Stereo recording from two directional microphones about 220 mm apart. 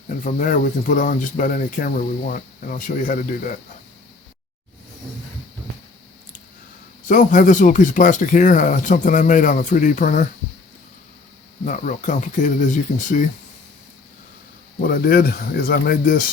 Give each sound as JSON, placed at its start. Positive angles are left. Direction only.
{"t": 0.1, "sound": "speech", "side_deg": 35}
{"t": 7.1, "sound": "speech", "side_deg": 35}
{"t": 11.6, "sound": "speech", "side_deg": 35}
{"t": 14.8, "sound": "speech", "side_deg": 45}